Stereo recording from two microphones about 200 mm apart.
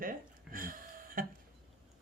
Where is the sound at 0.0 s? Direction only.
45° right (ahead or behind).